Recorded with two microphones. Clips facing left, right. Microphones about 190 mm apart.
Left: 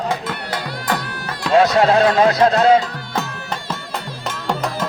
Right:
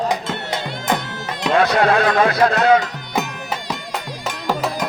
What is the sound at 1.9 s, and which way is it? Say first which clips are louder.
Speech: left 2 dB; 30° left (ahead or behind).